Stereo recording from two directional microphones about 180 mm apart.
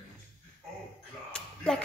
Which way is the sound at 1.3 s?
5° left (ahead or behind).